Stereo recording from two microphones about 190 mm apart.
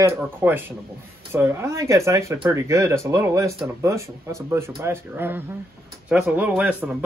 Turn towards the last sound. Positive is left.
turn(degrees=-5)  # may be behind; listen again after turning